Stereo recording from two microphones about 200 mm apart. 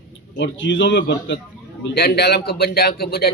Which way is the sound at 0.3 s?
65° left (ahead or behind).